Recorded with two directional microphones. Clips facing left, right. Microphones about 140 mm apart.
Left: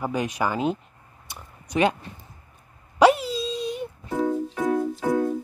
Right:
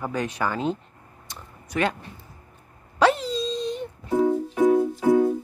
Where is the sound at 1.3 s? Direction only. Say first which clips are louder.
Left 2 dB; 20° left (ahead or behind).